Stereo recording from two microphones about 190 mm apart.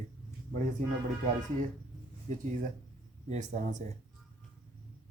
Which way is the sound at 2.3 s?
40° right (ahead or behind).